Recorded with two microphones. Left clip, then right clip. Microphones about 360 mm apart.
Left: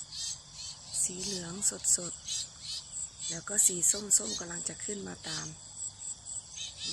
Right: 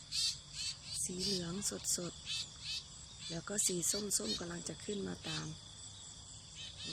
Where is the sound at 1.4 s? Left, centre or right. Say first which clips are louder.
Left 5 dB; centre.